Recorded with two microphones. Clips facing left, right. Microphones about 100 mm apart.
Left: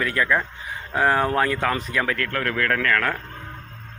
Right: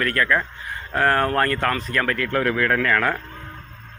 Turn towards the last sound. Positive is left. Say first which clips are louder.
# right 2 dB
turn(degrees=-10)  # may be behind; listen again after turning